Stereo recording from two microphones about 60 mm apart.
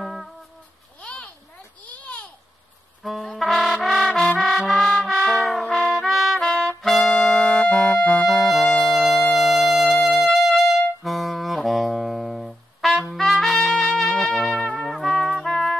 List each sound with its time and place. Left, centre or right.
0.0 s music: centre
1.0 s a sound: left
3.0 s music: centre
5.8 s trumpet: centre
6.0 s music: centre
6.4 s trumpet: centre
6.8 s brass instrument: centre
13.1 s trumpet: centre
13.9 s music: centre